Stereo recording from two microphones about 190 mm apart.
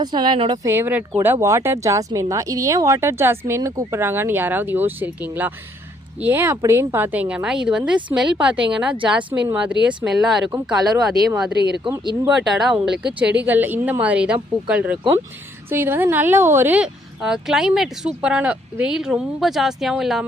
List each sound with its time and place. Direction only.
0.0 s speech: 25° right (ahead or behind)
0.7 s a woman's voice: 10° right (ahead or behind)
12.0 s speech: 20° right (ahead or behind)
12.5 s a woman's voice: centre (ahead or behind)